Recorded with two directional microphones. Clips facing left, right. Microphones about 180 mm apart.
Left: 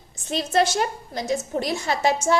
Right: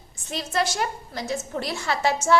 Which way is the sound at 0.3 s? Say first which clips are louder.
Left 5 dB; 25° left (ahead or behind).